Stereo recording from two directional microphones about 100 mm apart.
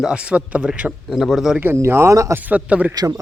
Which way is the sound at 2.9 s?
40° right (ahead or behind).